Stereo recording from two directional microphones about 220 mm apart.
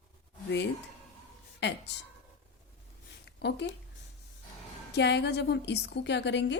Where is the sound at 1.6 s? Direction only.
50° left (ahead or behind).